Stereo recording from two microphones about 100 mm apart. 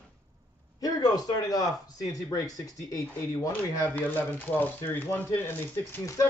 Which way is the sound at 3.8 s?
20° left (ahead or behind).